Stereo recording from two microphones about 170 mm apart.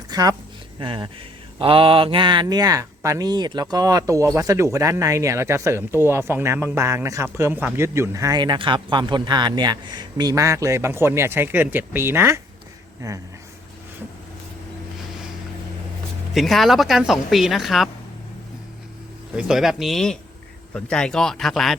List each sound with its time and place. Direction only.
0.1 s speech: 20° right (ahead or behind)
16.3 s speech: centre (ahead or behind)
19.4 s speech: 5° right (ahead or behind)